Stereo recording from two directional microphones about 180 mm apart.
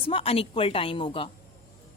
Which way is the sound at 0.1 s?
30° left (ahead or behind).